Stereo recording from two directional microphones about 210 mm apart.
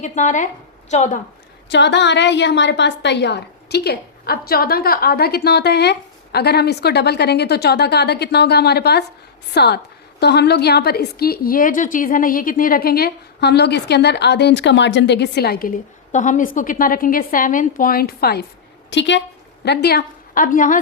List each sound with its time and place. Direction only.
0.0 s a woman's voice: 35° left (ahead or behind)
1.7 s a woman's voice: 55° left (ahead or behind)
16.1 s a woman's voice: 35° left (ahead or behind)